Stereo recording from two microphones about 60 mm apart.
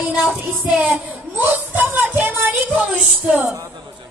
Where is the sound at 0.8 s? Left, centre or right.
Right.